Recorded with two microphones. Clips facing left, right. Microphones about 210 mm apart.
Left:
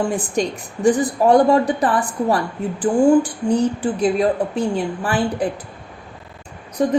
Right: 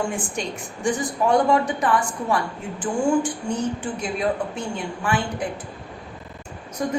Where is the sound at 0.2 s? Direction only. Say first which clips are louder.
Left 7 dB; 35° left (ahead or behind).